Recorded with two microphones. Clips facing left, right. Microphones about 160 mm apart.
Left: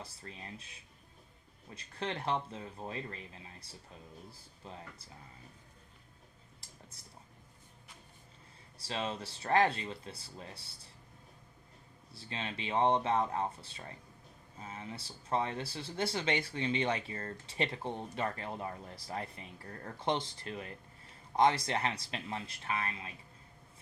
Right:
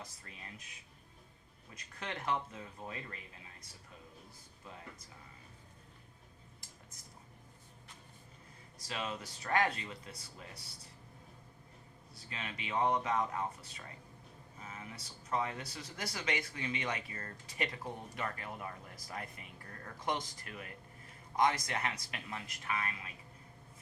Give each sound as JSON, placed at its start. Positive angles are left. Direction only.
{"t": 0.0, "sound": "speech", "side_deg": 30}
{"t": 8.8, "sound": "speech", "side_deg": 30}
{"t": 12.1, "sound": "speech", "side_deg": 30}